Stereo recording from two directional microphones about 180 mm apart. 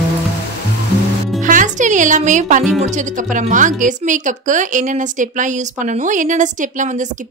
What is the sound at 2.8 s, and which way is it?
Speech, 45° right (ahead or behind).